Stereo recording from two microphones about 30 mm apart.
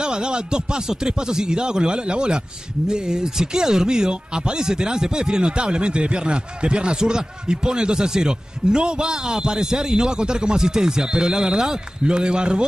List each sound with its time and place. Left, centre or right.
0.0 s a man's voice: right